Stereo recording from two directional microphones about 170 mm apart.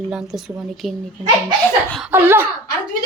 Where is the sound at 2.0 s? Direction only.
10° right (ahead or behind).